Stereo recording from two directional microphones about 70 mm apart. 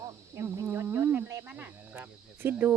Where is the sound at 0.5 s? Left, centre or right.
Right.